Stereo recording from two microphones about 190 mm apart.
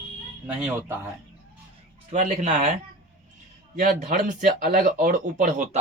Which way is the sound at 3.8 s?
45° right (ahead or behind).